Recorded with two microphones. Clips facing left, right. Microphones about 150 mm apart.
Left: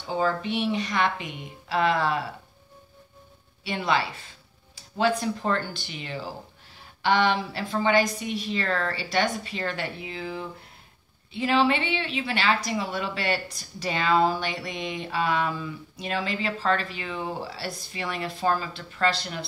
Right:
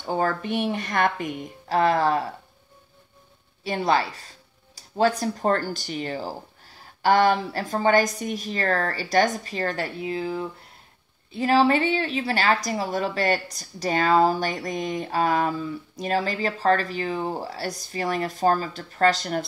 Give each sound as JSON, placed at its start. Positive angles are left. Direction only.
{"t": 0.0, "sound": "a woman's voice", "side_deg": -50}
{"t": 3.6, "sound": "a woman's voice", "side_deg": -40}